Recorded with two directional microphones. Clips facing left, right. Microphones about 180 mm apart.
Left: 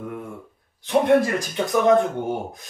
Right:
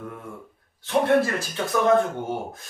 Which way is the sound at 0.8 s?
15° left (ahead or behind).